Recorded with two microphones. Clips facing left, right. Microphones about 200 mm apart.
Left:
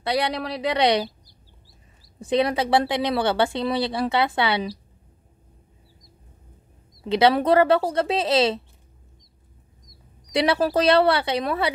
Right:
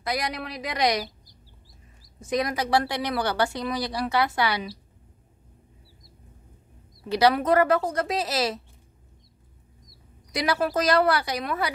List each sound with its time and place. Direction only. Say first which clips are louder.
0.0 s a woman's voice: left 5 dB; 30° left (ahead or behind)
2.2 s speech: left 5 dB; 30° left (ahead or behind)
7.1 s speech: left 3 dB; 25° left (ahead or behind)
10.3 s speech: left 4 dB; 30° left (ahead or behind)